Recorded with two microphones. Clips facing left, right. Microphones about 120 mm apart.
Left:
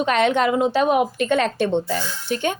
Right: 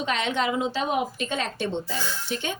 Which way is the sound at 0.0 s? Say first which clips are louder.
Left 8 dB; 55° left (ahead or behind).